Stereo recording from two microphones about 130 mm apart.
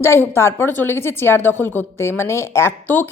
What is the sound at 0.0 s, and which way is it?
A woman's voice, 20° left (ahead or behind).